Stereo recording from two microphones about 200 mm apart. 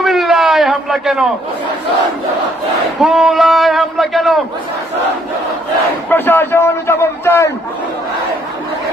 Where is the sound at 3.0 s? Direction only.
Centre (ahead or behind).